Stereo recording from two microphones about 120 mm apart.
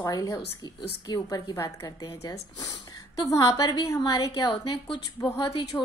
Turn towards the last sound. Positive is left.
turn(degrees=45)  # may be behind; listen again after turning